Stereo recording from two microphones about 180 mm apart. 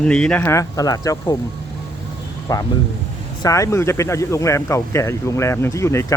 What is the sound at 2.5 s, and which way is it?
Speech, 20° left (ahead or behind).